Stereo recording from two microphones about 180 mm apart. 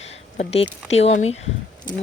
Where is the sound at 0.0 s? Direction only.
35° left (ahead or behind).